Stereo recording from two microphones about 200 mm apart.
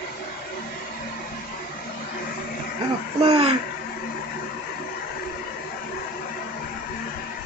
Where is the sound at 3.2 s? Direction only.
25° right (ahead or behind).